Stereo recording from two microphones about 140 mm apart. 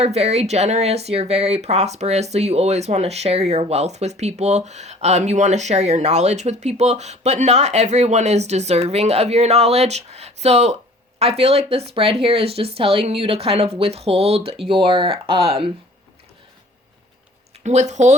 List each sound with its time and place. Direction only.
0.0 s speech: 50° right (ahead or behind)
17.6 s speech: 55° right (ahead or behind)